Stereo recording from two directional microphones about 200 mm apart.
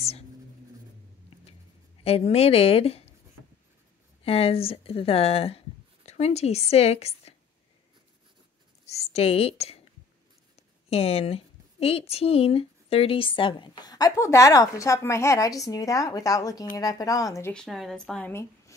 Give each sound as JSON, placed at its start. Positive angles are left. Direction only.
{"t": 2.0, "sound": "a woman's voice", "side_deg": 30}
{"t": 4.2, "sound": "a woman's voice", "side_deg": 30}
{"t": 8.8, "sound": "a woman's voice", "side_deg": 30}